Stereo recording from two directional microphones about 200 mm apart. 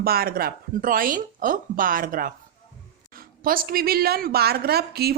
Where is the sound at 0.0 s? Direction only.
50° right (ahead or behind).